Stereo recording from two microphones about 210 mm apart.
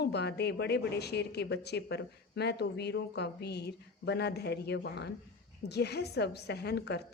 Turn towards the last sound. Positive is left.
turn(degrees=50)  # may be behind; listen again after turning